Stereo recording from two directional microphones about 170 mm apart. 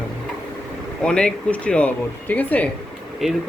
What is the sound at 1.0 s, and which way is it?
Speech, 5° left (ahead or behind).